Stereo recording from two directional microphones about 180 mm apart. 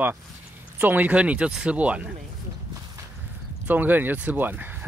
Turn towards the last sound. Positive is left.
turn(degrees=-10)  # may be behind; listen again after turning